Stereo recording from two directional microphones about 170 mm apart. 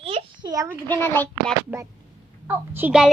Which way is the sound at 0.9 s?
10° left (ahead or behind).